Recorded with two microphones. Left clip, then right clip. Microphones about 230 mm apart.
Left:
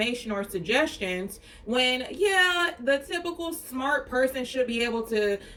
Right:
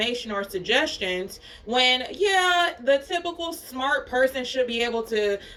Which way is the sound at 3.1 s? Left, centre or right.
Centre.